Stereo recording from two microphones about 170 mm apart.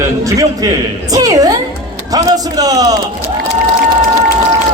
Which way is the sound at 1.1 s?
20° right (ahead or behind).